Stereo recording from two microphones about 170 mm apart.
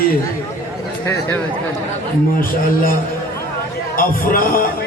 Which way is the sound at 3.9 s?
55° left (ahead or behind).